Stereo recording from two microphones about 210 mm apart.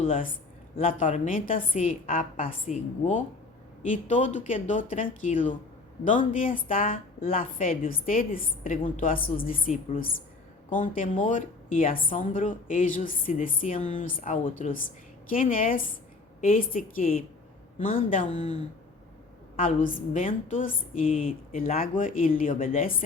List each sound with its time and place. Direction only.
0.1 s a woman's voice: 40° left (ahead or behind)